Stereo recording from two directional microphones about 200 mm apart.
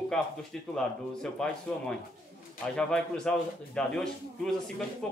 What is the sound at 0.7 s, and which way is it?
A man's voice, 5° left (ahead or behind).